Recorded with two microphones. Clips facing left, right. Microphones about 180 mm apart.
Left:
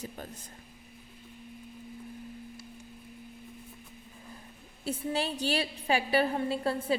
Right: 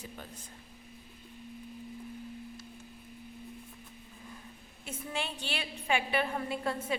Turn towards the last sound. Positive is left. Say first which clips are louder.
# left 4 dB
turn(degrees=30)  # may be behind; listen again after turning